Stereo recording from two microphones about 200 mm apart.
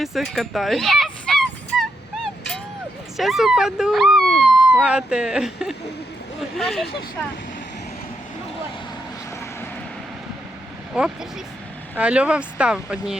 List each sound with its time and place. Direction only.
0.0 s speech: centre (ahead or behind)
3.2 s speech: centre (ahead or behind)
10.9 s speech: 5° right (ahead or behind)